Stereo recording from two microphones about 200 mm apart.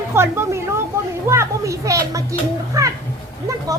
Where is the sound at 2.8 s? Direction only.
15° right (ahead or behind).